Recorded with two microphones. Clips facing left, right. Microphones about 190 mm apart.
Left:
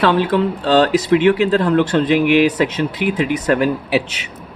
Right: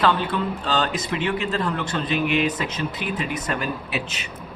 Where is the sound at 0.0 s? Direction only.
75° left (ahead or behind).